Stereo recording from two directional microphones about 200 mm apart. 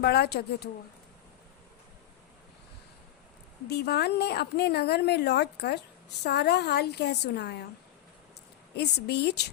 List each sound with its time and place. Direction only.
0.0 s speech: 55° left (ahead or behind)
3.7 s a woman's voice: 55° left (ahead or behind)
8.7 s a woman's voice: 55° left (ahead or behind)